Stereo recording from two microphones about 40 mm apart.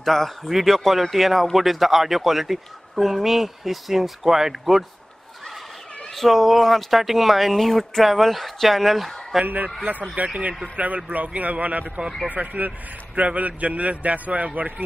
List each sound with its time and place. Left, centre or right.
0.0 s speech: centre
6.1 s speech: centre
10.1 s a man's voice: right
13.1 s a man's voice: right